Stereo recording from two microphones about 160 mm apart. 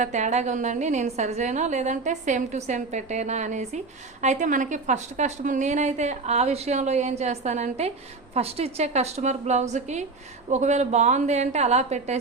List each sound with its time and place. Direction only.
0.0 s a woman's voice: 45° right (ahead or behind)